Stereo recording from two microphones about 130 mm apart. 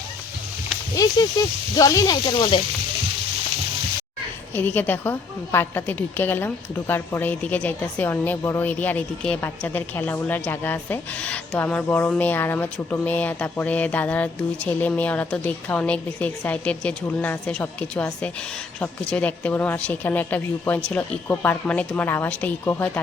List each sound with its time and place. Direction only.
1.0 s speech: 25° left (ahead or behind)
4.5 s a woman's voice: 15° left (ahead or behind)